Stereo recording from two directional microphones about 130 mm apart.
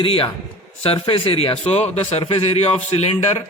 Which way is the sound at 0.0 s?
45° left (ahead or behind).